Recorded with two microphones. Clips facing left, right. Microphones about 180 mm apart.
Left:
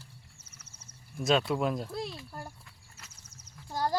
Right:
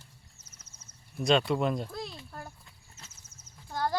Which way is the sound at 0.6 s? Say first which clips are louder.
Left 2 dB; 30° left (ahead or behind).